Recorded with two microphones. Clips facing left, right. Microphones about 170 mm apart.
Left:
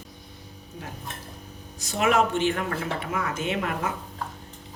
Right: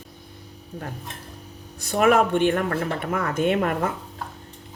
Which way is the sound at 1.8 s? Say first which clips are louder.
Right 4 dB; 55° right (ahead or behind).